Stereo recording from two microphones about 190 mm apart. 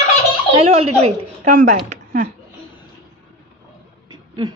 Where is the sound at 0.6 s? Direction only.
30° right (ahead or behind).